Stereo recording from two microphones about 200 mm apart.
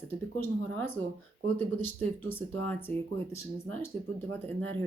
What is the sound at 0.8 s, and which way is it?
Speech, 10° left (ahead or behind).